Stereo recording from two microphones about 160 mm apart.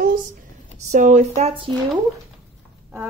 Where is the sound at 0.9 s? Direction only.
50° right (ahead or behind).